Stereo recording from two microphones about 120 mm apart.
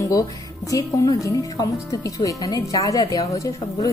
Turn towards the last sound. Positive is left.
turn(degrees=25)  # may be behind; listen again after turning